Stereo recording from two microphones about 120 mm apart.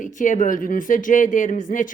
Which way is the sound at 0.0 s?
90° left.